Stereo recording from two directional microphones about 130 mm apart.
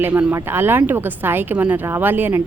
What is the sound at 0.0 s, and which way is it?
Speech, 15° right (ahead or behind).